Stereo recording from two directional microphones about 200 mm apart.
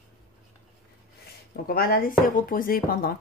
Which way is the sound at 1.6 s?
50° left (ahead or behind).